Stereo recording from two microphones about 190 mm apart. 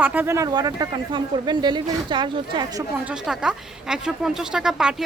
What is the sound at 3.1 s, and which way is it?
A man's voice, 5° right (ahead or behind).